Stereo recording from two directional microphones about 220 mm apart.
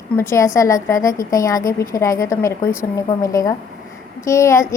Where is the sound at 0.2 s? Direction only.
10° left (ahead or behind).